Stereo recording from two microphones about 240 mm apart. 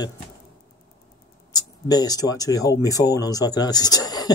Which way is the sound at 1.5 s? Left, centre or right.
Centre.